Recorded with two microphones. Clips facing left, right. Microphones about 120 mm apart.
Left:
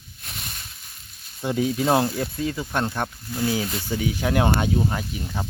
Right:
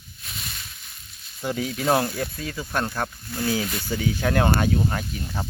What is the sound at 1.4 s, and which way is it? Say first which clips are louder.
Speech: left 4 dB; 20° left (ahead or behind).